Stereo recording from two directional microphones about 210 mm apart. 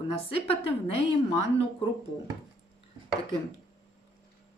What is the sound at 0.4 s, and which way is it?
Speech, 25° left (ahead or behind).